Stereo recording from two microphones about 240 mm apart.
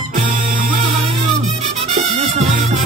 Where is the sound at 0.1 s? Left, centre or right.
Right.